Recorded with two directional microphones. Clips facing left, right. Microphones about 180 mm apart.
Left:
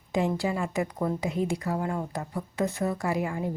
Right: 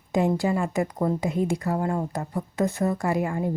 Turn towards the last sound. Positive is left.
turn(degrees=-45)  # may be behind; listen again after turning